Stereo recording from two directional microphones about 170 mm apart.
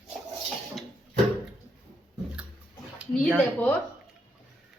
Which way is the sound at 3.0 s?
5° right (ahead or behind).